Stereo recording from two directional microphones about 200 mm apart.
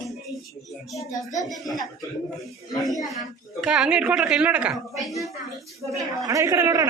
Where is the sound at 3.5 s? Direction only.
5° right (ahead or behind).